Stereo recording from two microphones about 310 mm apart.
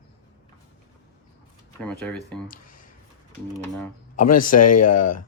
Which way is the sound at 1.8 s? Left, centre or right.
Centre.